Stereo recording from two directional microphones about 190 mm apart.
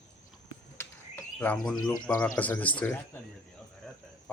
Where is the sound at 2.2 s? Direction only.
10° left (ahead or behind).